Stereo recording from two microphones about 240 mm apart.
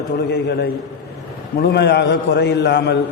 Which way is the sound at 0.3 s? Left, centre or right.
Left.